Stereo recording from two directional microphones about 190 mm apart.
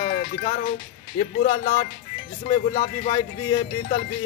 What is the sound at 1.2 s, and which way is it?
Speech, 30° left (ahead or behind).